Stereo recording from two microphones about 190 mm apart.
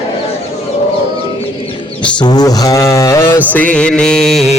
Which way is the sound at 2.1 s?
20° left (ahead or behind).